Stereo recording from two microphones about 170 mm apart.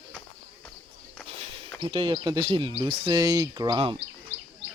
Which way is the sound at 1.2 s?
35° right (ahead or behind).